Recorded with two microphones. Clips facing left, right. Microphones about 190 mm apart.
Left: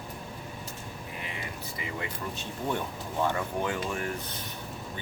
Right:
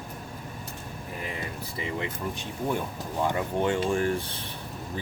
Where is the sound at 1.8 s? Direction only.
30° right (ahead or behind).